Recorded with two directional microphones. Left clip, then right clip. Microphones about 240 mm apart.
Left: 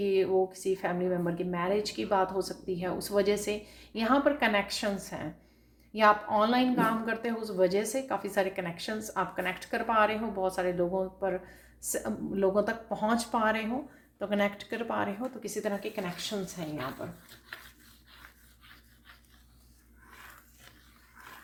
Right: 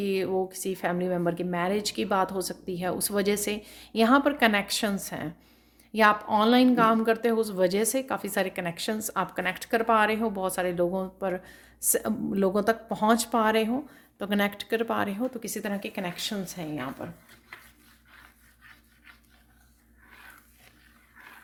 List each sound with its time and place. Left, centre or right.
0.0 s speech: right